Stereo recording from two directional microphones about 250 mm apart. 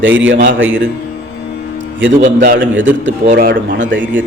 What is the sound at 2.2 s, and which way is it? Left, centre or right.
Speech, right.